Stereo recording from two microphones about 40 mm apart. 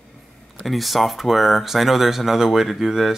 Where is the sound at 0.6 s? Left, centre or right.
Centre.